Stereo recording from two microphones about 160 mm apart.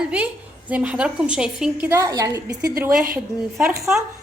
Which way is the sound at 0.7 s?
5° right (ahead or behind).